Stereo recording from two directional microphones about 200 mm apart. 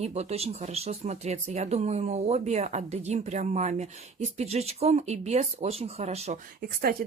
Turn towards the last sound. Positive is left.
turn(degrees=-35)  # may be behind; listen again after turning